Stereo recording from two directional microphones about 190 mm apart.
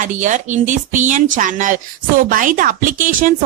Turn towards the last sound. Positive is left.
turn(degrees=-45)  # may be behind; listen again after turning